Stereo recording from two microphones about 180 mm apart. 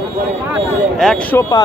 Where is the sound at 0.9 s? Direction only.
Centre (ahead or behind).